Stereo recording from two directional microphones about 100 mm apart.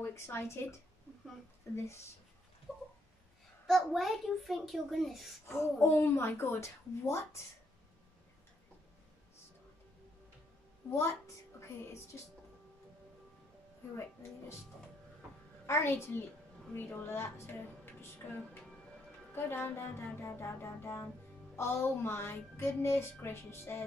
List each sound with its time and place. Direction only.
0.0 s speech: 25° left (ahead or behind)
2.7 s a sound: centre (ahead or behind)
3.6 s a child's voice: centre (ahead or behind)
5.5 s speech: 25° left (ahead or behind)
10.9 s a woman's voice: 25° left (ahead or behind)
15.6 s speech: 25° left (ahead or behind)